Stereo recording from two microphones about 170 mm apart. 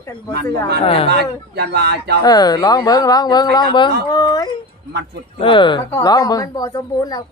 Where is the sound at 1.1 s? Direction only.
75° right (ahead or behind).